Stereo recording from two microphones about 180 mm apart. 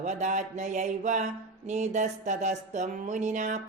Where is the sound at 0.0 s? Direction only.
40° right (ahead or behind).